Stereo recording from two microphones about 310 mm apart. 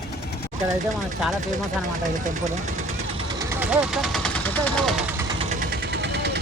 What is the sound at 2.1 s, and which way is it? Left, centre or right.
Speech, right.